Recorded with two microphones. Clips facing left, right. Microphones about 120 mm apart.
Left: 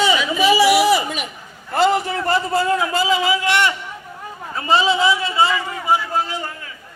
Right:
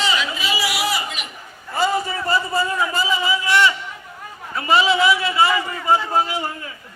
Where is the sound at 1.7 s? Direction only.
75° left (ahead or behind).